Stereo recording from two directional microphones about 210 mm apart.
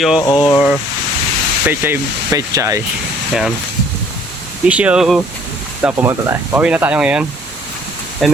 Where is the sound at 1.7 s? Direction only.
15° right (ahead or behind).